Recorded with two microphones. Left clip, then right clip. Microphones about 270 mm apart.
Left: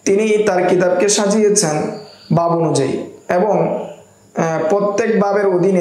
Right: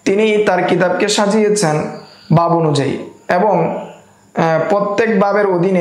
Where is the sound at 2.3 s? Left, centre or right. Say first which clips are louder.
Right 2 dB; right.